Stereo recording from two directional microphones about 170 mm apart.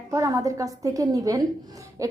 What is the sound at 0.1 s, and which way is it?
A woman's voice, 20° right (ahead or behind).